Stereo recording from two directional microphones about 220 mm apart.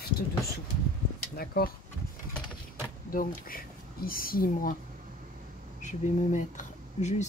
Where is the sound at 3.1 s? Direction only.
40° left (ahead or behind).